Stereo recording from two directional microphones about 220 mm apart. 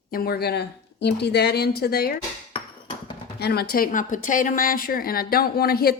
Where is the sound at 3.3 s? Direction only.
45° left (ahead or behind).